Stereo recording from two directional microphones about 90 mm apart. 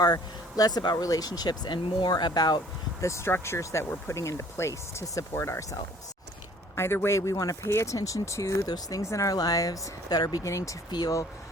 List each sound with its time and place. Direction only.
0.0 s speech: 45° left (ahead or behind)
3.0 s speech: 30° left (ahead or behind)
6.7 s speech: 25° left (ahead or behind); by 10.2 s 45° left (ahead or behind)
10.4 s speech: 35° left (ahead or behind)